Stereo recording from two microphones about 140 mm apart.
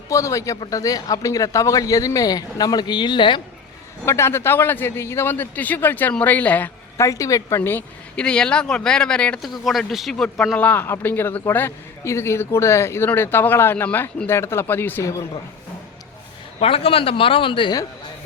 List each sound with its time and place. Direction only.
0.1 s speech: 20° left (ahead or behind)
4.0 s a man's voice: 20° left (ahead or behind)
16.6 s a man's voice: 45° left (ahead or behind)